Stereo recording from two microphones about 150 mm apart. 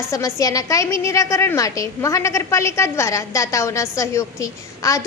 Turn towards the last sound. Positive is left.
turn(degrees=20)  # may be behind; listen again after turning